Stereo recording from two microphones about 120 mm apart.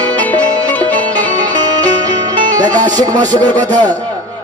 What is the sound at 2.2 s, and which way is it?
Music, 35° right (ahead or behind).